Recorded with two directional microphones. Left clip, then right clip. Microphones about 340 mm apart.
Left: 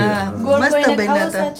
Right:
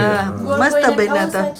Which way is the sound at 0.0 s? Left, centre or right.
Centre.